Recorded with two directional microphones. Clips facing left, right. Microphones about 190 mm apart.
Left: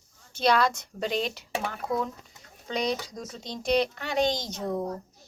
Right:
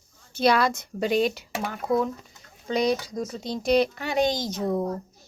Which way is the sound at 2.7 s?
5° right (ahead or behind).